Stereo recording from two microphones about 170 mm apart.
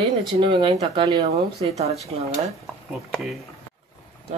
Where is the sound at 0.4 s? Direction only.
30° right (ahead or behind).